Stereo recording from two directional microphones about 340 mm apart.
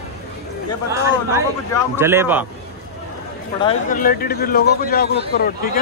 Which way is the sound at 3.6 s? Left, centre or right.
Left.